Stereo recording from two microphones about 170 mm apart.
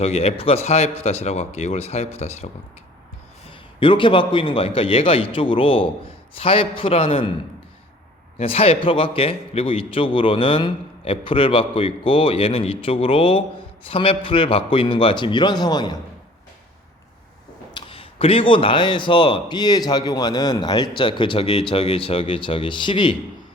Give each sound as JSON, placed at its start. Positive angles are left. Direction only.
{"t": 0.0, "sound": "a man's voice", "side_deg": 35}
{"t": 3.8, "sound": "a man's voice", "side_deg": 30}
{"t": 8.4, "sound": "a man's voice", "side_deg": 35}
{"t": 17.7, "sound": "a man's voice", "side_deg": 30}